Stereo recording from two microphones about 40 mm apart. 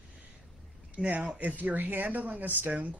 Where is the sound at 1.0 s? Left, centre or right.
Left.